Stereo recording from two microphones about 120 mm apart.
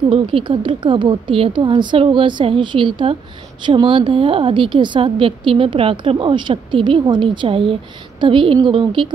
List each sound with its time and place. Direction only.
0.1 s a woman's voice: 45° right (ahead or behind)